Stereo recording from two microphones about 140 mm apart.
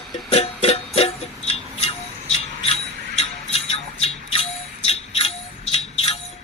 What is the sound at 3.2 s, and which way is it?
Music, 45° left (ahead or behind).